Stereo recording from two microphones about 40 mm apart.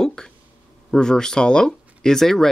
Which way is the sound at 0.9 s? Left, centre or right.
Centre.